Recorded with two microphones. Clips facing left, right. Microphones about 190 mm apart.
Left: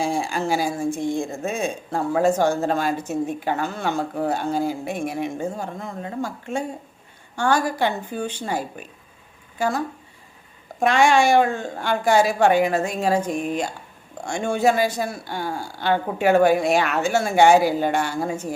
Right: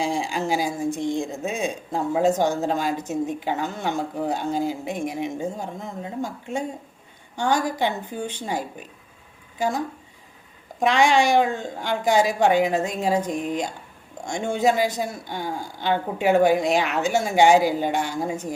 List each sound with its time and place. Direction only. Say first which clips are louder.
0.0 s a woman's voice: left 1 dB; 15° right (ahead or behind)
11.1 s speech: left 2 dB; 15° right (ahead or behind)